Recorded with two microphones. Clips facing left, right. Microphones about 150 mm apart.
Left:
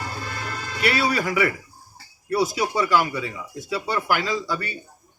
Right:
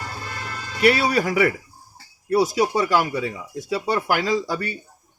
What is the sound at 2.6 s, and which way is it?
Speech, 35° right (ahead or behind).